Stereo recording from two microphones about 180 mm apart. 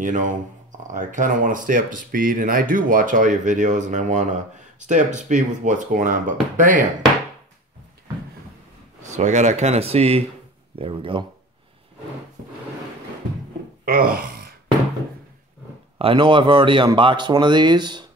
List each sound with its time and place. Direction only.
0.0 s speech: 45° right (ahead or behind)
9.0 s speech: 40° right (ahead or behind)
13.8 s speech: 55° right (ahead or behind)
16.0 s speech: 30° right (ahead or behind)